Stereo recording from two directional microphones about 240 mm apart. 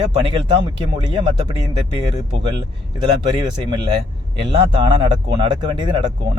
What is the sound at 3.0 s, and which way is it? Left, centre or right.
Speech, centre.